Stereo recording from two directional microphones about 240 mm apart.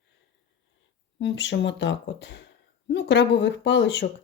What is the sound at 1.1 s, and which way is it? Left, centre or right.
Speech, left.